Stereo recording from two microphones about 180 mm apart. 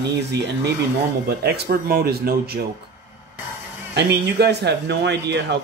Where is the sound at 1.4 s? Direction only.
65° right (ahead or behind).